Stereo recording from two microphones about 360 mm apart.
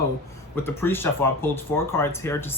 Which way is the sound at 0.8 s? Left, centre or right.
Centre.